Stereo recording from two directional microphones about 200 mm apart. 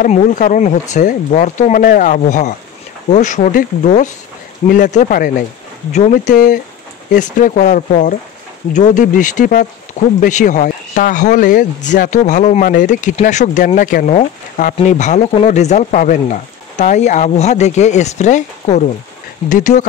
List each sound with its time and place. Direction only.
0.0 s speech: 40° left (ahead or behind)